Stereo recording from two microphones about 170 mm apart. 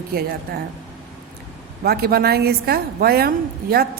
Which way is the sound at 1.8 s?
65° right (ahead or behind).